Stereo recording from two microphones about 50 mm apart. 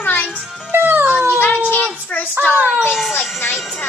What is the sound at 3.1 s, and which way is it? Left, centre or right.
Speech, left.